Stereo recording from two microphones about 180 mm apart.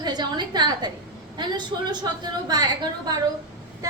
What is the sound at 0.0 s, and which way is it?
A woman's voice, 25° right (ahead or behind).